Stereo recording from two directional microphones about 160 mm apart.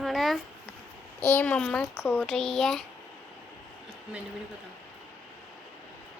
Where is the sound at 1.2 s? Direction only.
15° left (ahead or behind).